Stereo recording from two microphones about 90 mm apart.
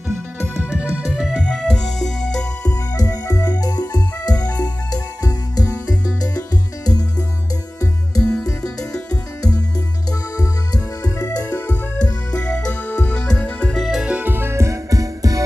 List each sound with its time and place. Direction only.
0.5 s music: 10° right (ahead or behind); by 2.5 s 5° left (ahead or behind)
2.6 s music: 40° left (ahead or behind)
8.2 s music: 10° left (ahead or behind)
10.1 s music: 45° left (ahead or behind)
11.5 s music: 15° left (ahead or behind)
13.7 s music: 5° right (ahead or behind); by 15.4 s 40° right (ahead or behind)